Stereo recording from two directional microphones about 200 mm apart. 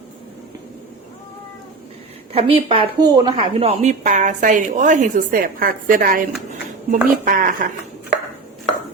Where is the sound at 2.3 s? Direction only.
30° right (ahead or behind).